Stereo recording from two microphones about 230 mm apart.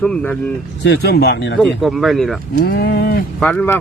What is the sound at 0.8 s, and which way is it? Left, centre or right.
Speech, left.